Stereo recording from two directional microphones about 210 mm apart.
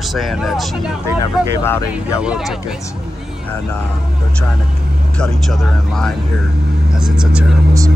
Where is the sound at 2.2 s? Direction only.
5° right (ahead or behind).